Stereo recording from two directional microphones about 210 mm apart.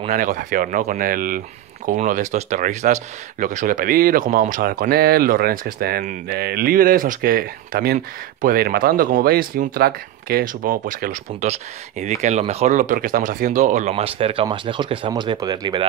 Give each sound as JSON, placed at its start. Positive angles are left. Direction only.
{"t": 0.1, "sound": "speech", "side_deg": -40}